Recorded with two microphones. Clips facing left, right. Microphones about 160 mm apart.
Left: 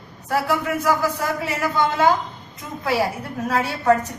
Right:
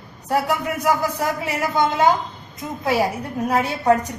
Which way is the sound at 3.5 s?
20° right (ahead or behind).